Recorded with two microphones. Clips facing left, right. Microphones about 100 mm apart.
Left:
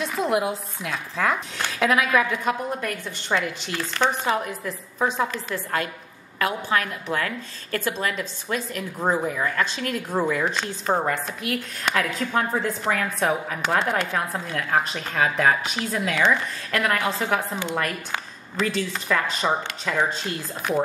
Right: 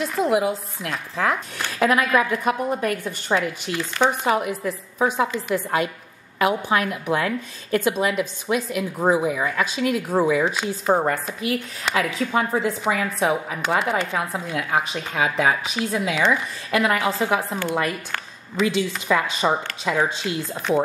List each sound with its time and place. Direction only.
0.0 s a woman's voice: centre (ahead or behind)
20.7 s speech: 20° right (ahead or behind)